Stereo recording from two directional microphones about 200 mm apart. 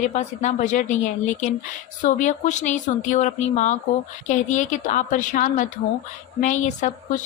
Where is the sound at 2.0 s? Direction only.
40° left (ahead or behind).